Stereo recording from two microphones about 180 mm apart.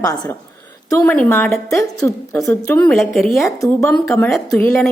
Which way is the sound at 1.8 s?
15° left (ahead or behind).